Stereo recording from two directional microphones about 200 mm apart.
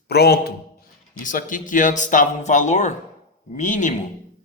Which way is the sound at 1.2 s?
40° left (ahead or behind).